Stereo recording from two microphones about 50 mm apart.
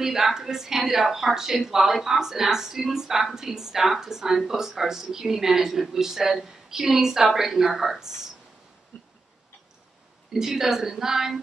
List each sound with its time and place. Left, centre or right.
0.0 s speech: centre
8.9 s a sound: left
10.3 s speech: centre